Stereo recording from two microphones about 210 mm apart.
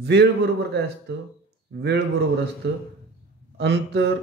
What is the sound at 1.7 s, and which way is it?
Speech, 55° right (ahead or behind).